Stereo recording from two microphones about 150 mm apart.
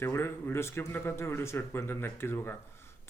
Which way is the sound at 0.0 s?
15° left (ahead or behind).